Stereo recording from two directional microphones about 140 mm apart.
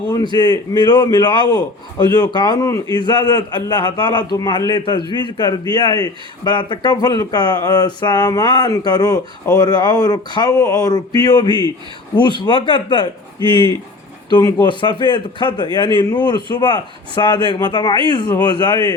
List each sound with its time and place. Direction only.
0.3 s a man's voice: 25° left (ahead or behind)
11.4 s speech: 35° right (ahead or behind)
12.4 s a man's voice: 35° left (ahead or behind)
13.4 s speech: 35° right (ahead or behind)
14.3 s a man's voice: 30° left (ahead or behind)